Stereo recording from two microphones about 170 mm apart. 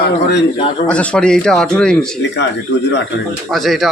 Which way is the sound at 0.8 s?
5° left (ahead or behind).